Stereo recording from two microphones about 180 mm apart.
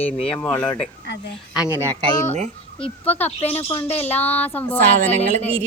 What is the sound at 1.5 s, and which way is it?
Speech, 5° right (ahead or behind).